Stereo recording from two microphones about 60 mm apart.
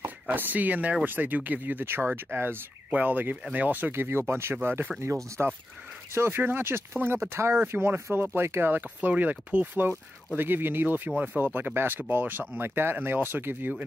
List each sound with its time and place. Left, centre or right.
0.0 s speech: right
5.0 s speech: right
6.3 s speech: right